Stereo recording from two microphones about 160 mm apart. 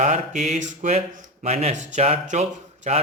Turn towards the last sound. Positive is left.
turn(degrees=-45)  # may be behind; listen again after turning